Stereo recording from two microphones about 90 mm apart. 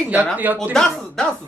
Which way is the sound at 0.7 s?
5° left (ahead or behind).